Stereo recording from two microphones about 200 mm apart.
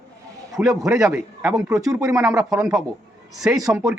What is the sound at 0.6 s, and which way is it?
A man's voice, 10° right (ahead or behind).